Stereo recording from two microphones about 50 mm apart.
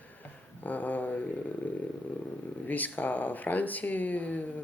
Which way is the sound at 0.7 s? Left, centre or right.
Left.